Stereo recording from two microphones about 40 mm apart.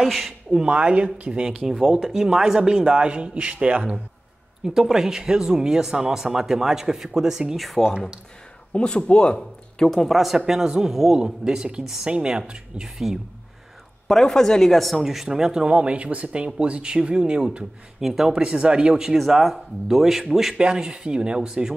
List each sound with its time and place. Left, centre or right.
0.0 s speech: centre
0.7 s speech: right
1.7 s speech: centre; by 3.7 s right
4.6 s speech: centre
7.5 s speech: centre
8.7 s speech: left
9.8 s speech: centre
10.4 s speech: centre
12.8 s speech: centre
14.0 s speech: centre
15.6 s speech: right; by 18.4 s centre
18.4 s speech: right
19.1 s speech: centre
20.5 s speech: centre